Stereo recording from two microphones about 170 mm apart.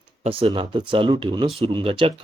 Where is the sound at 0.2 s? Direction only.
35° right (ahead or behind).